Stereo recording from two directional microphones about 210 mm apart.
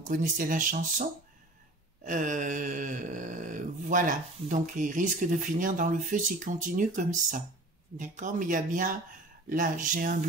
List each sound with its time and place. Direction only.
0.1 s speech: 40° right (ahead or behind)
2.0 s speech: 35° right (ahead or behind)